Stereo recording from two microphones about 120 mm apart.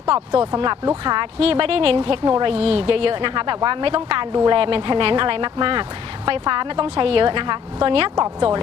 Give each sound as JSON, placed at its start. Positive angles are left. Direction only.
{"t": 0.1, "sound": "a woman's voice", "side_deg": -45}
{"t": 2.2, "sound": "speech", "side_deg": -35}
{"t": 2.5, "sound": "a woman's voice", "side_deg": -55}